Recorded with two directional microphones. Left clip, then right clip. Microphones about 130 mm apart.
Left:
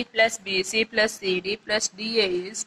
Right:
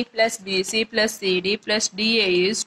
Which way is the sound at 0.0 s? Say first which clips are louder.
Even; 30° right (ahead or behind).